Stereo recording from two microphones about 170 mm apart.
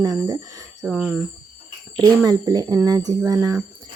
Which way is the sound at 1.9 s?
20° right (ahead or behind).